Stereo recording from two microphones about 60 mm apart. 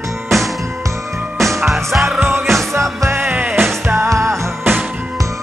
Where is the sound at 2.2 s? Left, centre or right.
Right.